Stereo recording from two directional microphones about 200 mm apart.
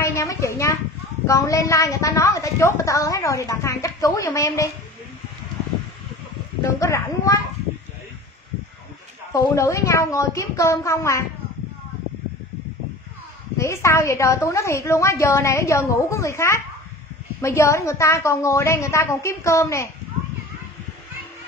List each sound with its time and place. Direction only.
0.0 s a sound: 15° left (ahead or behind)
1.2 s a woman's voice: 15° left (ahead or behind)
6.8 s a woman's voice: 15° left (ahead or behind)
9.3 s a woman's voice: 15° left (ahead or behind)
13.6 s a woman's voice: 15° left (ahead or behind)